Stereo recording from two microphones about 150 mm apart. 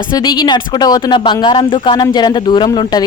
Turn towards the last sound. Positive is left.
turn(degrees=25)  # may be behind; listen again after turning